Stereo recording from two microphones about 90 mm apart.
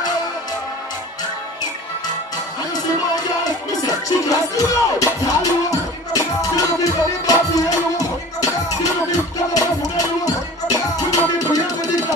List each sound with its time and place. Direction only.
3.8 s music: 40° left (ahead or behind)